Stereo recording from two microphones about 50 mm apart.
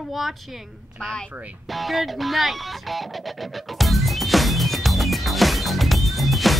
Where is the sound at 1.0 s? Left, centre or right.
Centre.